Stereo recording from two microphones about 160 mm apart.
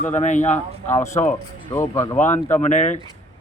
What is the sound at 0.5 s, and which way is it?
Speech, 15° left (ahead or behind).